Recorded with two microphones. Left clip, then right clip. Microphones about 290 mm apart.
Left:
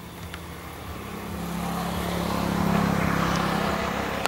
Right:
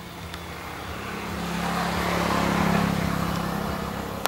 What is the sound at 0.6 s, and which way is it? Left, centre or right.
Vehicle, centre.